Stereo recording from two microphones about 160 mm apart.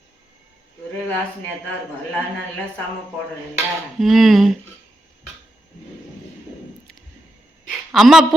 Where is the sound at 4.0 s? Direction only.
Centre (ahead or behind).